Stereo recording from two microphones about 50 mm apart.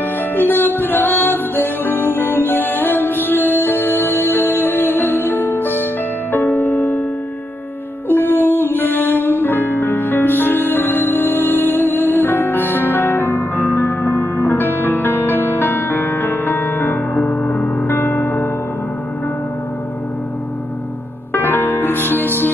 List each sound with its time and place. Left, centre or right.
0.4 s music: left
8.1 s music: left
21.3 s music: left